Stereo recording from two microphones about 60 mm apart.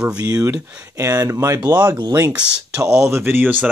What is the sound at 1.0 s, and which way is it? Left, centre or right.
Speech, right.